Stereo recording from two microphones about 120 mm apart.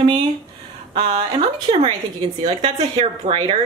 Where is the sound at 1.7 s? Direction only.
45° right (ahead or behind).